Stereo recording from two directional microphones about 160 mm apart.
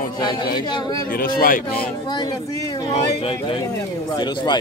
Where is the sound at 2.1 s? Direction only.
25° left (ahead or behind).